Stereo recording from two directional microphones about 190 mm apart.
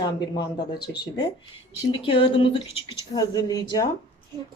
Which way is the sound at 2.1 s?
30° left (ahead or behind).